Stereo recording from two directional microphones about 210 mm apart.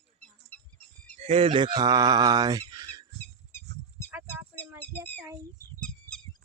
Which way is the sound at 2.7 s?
20° right (ahead or behind).